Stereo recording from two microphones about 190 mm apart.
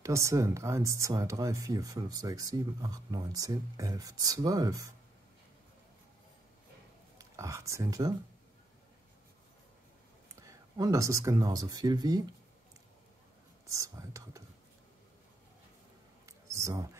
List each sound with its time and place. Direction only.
0.0 s speech: 15° right (ahead or behind)
7.2 s speech: 15° right (ahead or behind)
10.4 s speech: 15° right (ahead or behind)
13.7 s speech: 15° right (ahead or behind)
16.3 s a sound: 15° right (ahead or behind)